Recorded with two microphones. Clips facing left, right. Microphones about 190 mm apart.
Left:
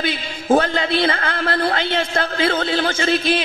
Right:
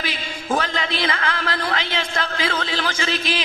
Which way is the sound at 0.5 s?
35° left (ahead or behind).